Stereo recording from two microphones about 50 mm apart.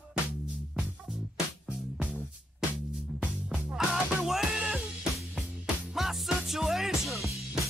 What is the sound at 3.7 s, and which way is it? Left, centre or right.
Music, centre.